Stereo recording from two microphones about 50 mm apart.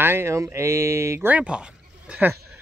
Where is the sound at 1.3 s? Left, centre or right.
Right.